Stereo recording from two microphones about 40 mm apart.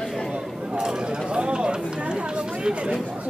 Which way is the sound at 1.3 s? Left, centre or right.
Right.